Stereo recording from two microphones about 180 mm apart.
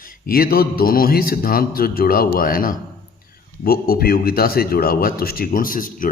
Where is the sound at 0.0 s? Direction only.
55° left (ahead or behind).